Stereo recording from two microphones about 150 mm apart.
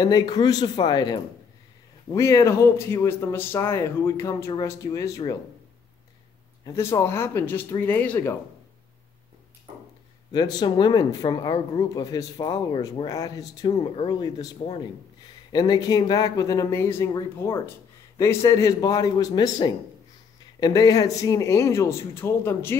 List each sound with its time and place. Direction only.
0.0 s speech: 25° left (ahead or behind)
6.6 s speech: 20° left (ahead or behind)
10.3 s speech: 30° left (ahead or behind)